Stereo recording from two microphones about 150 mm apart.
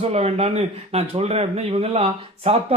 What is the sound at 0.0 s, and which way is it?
Speech, 45° right (ahead or behind).